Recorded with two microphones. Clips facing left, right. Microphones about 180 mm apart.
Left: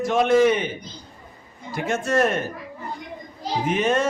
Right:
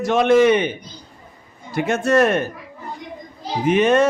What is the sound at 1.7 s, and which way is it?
Speech, 70° right (ahead or behind).